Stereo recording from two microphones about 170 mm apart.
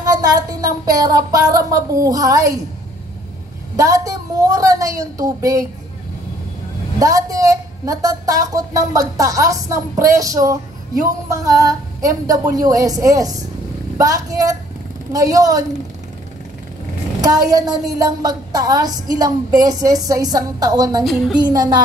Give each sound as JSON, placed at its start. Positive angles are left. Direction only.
{"t": 0.0, "sound": "a woman's voice", "side_deg": -20}
{"t": 3.7, "sound": "a woman's voice", "side_deg": -20}
{"t": 7.0, "sound": "a woman's voice", "side_deg": -20}
{"t": 17.2, "sound": "a woman's voice", "side_deg": -20}
{"t": 21.0, "sound": "a woman's voice", "side_deg": 0}
{"t": 21.4, "sound": "a woman's voice", "side_deg": -25}